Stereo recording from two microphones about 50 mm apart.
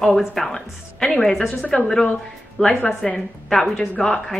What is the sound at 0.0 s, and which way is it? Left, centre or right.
A woman's voice, centre.